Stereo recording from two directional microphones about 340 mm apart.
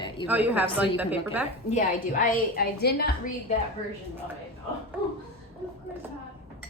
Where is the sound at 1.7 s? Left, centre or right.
Left.